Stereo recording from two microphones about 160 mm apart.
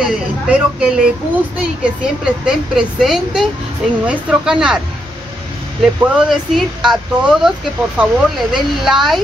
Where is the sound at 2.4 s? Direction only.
5° right (ahead or behind).